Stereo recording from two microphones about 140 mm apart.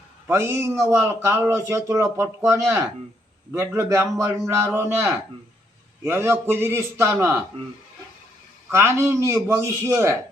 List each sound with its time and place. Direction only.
0.3 s a man's voice: 20° right (ahead or behind)
8.7 s speech: 20° right (ahead or behind)